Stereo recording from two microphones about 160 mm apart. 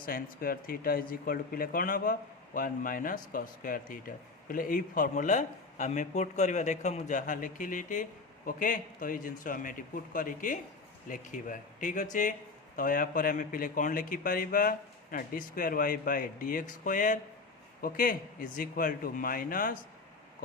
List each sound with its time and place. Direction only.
0.0 s a man's voice: 65° left (ahead or behind)